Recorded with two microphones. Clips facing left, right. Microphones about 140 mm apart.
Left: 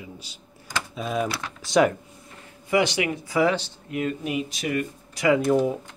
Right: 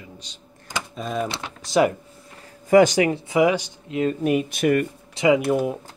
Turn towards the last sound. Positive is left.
turn(degrees=-5)  # may be behind; listen again after turning